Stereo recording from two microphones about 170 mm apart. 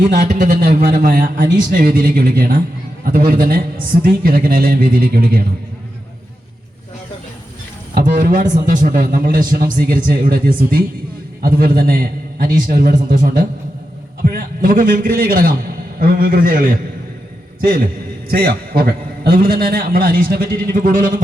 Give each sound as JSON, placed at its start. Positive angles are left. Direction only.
{"t": 0.1, "sound": "a man's voice", "side_deg": -60}
{"t": 7.9, "sound": "a man's voice", "side_deg": -55}